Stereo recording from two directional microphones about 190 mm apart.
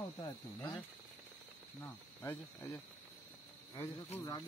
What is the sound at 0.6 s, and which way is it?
Speech, 15° left (ahead or behind).